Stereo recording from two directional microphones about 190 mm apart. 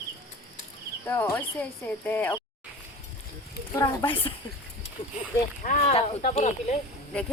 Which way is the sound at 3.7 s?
25° left (ahead or behind).